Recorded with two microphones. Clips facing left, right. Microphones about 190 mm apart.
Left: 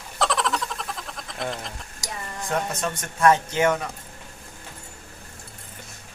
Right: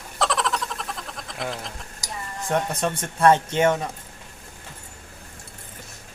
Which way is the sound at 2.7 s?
30° right (ahead or behind).